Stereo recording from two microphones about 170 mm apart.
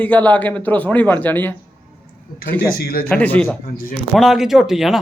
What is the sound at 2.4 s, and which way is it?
Speech, 65° left (ahead or behind).